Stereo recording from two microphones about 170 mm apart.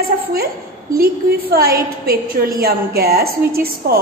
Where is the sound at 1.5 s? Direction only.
60° right (ahead or behind).